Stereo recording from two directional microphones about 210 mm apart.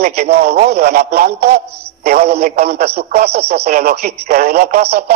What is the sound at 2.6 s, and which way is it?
Speech, 30° right (ahead or behind).